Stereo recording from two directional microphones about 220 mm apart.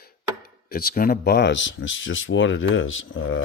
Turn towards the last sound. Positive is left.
turn(degrees=60)  # may be behind; listen again after turning